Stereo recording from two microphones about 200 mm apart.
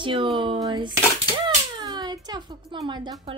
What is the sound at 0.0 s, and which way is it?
Speech, 25° right (ahead or behind).